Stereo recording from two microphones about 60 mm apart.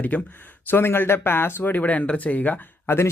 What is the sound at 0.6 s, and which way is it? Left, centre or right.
A man's voice, left.